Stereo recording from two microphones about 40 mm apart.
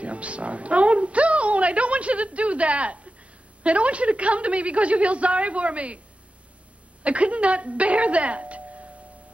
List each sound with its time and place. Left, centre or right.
0.0 s a woman's voice: right
7.0 s a woman's voice: right